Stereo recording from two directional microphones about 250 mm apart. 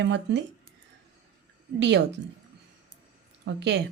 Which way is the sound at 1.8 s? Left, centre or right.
Right.